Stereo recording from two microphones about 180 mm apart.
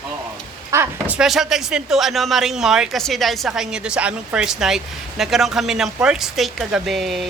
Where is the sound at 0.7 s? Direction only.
10° right (ahead or behind).